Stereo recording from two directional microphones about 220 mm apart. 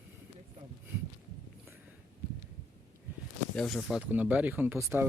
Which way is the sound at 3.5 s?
5° left (ahead or behind).